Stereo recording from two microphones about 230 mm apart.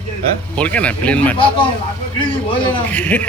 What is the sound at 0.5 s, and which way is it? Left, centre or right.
Speech, centre.